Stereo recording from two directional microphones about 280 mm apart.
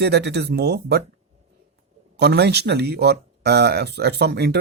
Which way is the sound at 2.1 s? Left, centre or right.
Right.